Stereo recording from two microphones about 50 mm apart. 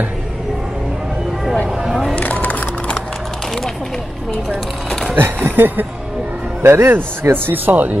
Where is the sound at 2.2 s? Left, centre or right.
Left.